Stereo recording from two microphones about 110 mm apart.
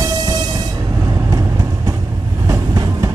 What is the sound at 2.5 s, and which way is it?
Train, 30° right (ahead or behind).